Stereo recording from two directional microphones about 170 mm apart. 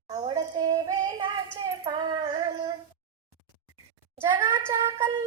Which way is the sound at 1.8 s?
25° right (ahead or behind).